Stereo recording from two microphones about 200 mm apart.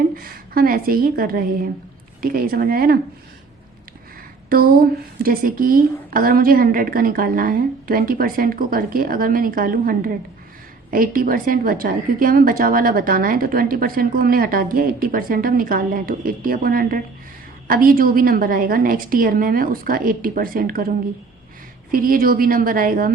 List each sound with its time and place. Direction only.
0.2 s a woman's voice: 45° right (ahead or behind)
4.4 s a woman's voice: 45° right (ahead or behind)
21.9 s a woman's voice: 45° right (ahead or behind)